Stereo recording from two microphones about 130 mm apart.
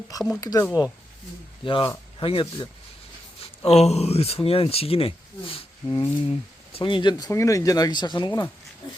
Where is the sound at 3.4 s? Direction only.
55° left (ahead or behind).